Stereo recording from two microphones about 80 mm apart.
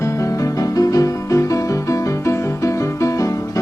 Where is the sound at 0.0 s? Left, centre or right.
Left.